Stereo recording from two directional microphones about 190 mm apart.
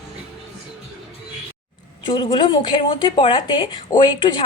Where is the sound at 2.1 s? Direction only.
25° left (ahead or behind).